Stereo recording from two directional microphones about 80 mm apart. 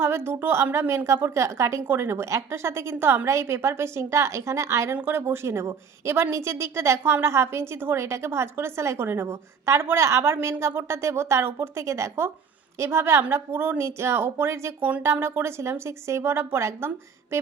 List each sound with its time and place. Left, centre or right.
0.0 s a woman's voice: right